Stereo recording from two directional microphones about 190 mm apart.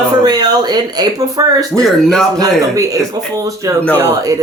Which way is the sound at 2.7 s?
15° right (ahead or behind).